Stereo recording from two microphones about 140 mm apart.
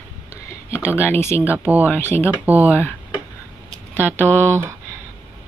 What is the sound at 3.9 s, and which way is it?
Speech, 15° left (ahead or behind).